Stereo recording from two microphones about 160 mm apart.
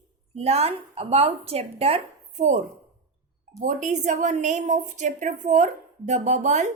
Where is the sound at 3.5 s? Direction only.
50° right (ahead or behind).